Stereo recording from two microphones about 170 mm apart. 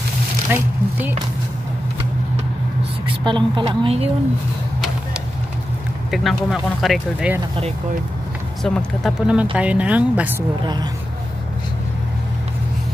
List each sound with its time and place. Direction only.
0.5 s speech: 10° right (ahead or behind)
3.3 s a woman's voice: 30° right (ahead or behind)
6.0 s speech: centre (ahead or behind)
8.6 s speech: centre (ahead or behind)
10.6 s a woman's voice: 25° right (ahead or behind)